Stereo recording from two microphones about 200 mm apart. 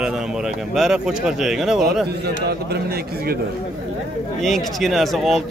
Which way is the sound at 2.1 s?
55° right (ahead or behind).